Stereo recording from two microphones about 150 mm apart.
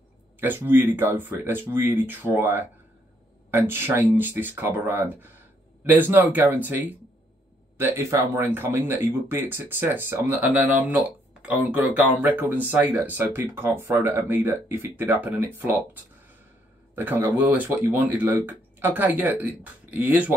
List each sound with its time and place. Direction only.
0.4 s speech: 15° right (ahead or behind)